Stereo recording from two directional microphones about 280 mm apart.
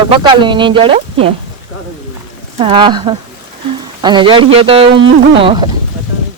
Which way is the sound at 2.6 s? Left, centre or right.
Centre.